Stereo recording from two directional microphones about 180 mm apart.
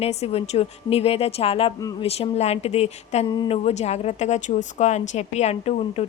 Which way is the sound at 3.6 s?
35° left (ahead or behind).